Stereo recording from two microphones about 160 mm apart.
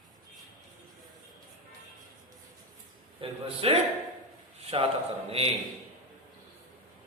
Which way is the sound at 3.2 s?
35° right (ahead or behind).